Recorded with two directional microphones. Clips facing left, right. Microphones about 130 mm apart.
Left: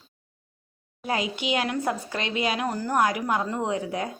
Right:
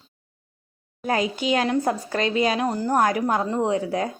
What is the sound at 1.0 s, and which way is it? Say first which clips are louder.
Speech: right 4 dB; 45° right (ahead or behind).